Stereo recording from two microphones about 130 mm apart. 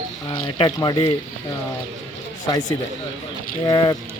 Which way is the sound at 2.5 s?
35° left (ahead or behind).